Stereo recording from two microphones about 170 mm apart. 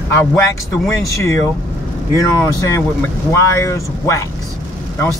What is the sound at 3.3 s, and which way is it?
Speech, 15° left (ahead or behind).